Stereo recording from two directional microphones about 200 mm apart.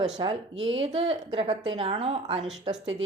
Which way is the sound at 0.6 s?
75° right (ahead or behind).